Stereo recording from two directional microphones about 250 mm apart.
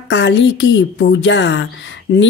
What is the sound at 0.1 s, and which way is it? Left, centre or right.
A woman's voice, left.